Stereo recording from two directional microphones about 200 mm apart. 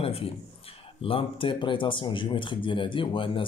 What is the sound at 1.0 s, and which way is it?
Speech, 25° left (ahead or behind).